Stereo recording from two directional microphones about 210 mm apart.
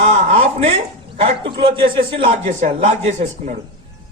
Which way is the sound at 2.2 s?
35° right (ahead or behind).